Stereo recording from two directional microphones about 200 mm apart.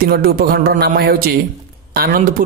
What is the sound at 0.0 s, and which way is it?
A man's voice, 50° right (ahead or behind).